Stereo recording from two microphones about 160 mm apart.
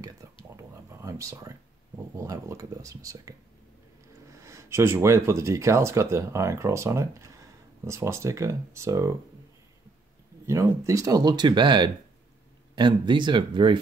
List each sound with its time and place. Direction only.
0.2 s a sound: 20° right (ahead or behind)
2.1 s speech: 20° right (ahead or behind)
4.4 s speech: 20° right (ahead or behind)
10.4 s speech: 15° right (ahead or behind)